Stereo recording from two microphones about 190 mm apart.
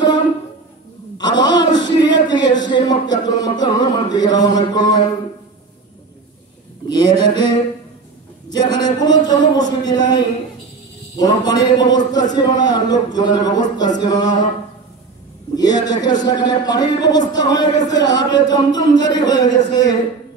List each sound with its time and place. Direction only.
1.1 s a man's voice: 20° left (ahead or behind)
6.9 s a sound: 20° left (ahead or behind)
8.5 s a man's voice: 20° left (ahead or behind)
15.5 s a man's voice: 20° left (ahead or behind)